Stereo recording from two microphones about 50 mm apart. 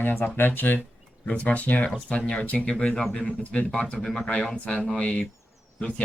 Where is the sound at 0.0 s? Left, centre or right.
Left.